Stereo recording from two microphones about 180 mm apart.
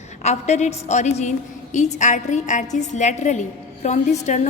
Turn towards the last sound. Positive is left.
turn(degrees=40)  # may be behind; listen again after turning